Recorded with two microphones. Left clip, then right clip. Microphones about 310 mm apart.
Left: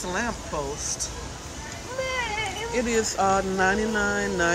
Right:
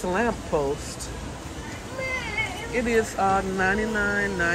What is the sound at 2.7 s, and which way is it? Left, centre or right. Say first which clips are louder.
Speech: right 2 dB; centre.